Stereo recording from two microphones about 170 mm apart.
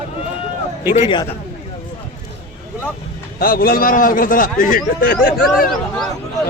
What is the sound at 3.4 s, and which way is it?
A man's voice, 60° left (ahead or behind).